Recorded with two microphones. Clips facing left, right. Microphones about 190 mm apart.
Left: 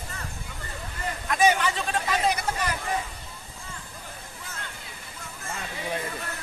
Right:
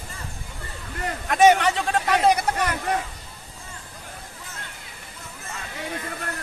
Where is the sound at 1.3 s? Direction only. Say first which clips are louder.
Right 6 dB; 65° right (ahead or behind).